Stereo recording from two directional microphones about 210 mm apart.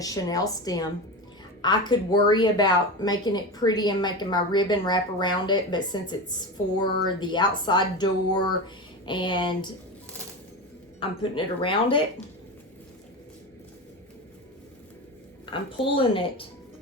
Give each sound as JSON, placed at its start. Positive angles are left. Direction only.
{"t": 0.0, "sound": "a woman's voice", "side_deg": 15}
{"t": 11.0, "sound": "a woman's voice", "side_deg": 25}
{"t": 15.5, "sound": "a woman's voice", "side_deg": 25}